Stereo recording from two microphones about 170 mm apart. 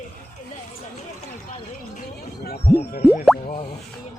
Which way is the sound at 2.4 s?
65° left (ahead or behind).